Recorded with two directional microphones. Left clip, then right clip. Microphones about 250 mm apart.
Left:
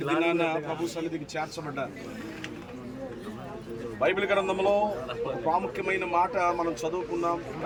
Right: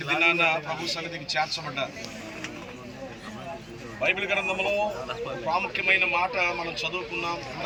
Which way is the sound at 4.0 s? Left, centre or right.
Centre.